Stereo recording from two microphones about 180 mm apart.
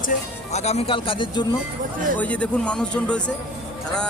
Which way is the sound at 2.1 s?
10° left (ahead or behind).